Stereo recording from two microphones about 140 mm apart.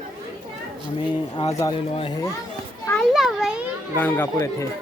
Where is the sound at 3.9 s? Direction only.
15° left (ahead or behind).